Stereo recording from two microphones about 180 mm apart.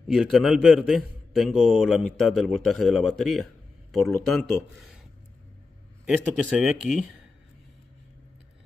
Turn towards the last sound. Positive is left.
turn(degrees=0)  # may be behind; listen again after turning